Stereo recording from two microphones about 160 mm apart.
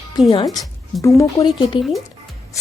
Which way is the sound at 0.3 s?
25° left (ahead or behind).